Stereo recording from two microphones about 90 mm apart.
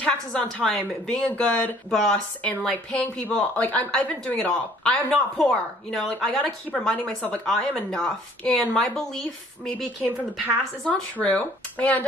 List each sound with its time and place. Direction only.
0.0 s speech: 10° left (ahead or behind)
10.9 s speech: 15° left (ahead or behind)